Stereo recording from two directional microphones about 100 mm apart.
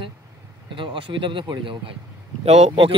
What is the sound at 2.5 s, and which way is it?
Speech, 90° right.